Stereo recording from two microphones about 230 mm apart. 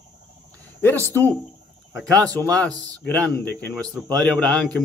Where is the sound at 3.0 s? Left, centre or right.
Centre.